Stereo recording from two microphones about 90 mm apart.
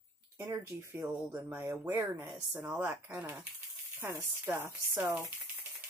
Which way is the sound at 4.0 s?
25° right (ahead or behind).